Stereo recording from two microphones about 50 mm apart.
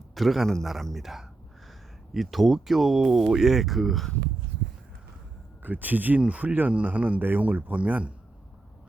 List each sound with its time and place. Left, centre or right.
0.1 s a man's voice: centre
5.6 s speech: right